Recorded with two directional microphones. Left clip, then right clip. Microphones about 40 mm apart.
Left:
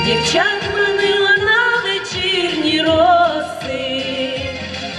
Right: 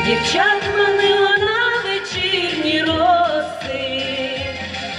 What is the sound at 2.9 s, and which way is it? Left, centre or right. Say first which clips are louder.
Music: left 4 dB; left.